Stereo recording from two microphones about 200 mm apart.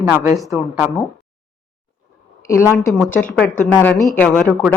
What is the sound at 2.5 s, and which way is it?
A woman's voice, 15° left (ahead or behind).